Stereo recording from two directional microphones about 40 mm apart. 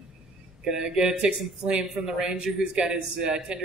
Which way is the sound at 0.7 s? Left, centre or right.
Centre.